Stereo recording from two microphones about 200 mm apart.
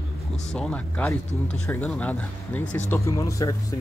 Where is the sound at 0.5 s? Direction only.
5° left (ahead or behind).